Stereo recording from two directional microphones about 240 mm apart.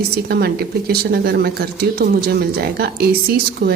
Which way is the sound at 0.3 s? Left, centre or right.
Right.